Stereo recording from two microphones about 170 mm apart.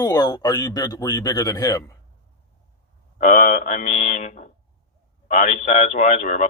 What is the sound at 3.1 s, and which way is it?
A man's voice, 50° left (ahead or behind).